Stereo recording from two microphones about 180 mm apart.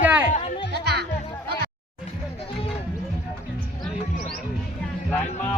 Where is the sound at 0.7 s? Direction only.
65° right (ahead or behind).